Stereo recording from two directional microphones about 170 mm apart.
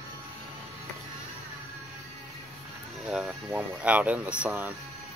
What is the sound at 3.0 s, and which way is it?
Speech, 5° right (ahead or behind).